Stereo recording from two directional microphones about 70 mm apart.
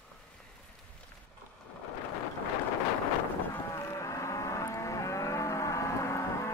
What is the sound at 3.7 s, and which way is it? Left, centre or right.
Livestock, left.